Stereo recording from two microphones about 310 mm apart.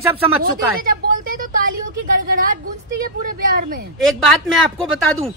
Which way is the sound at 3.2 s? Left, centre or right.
Right.